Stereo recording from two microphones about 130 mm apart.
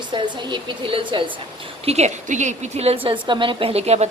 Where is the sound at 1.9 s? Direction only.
60° right (ahead or behind).